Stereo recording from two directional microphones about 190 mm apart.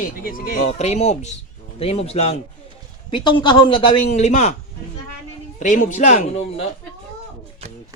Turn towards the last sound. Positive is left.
turn(degrees=40)  # may be behind; listen again after turning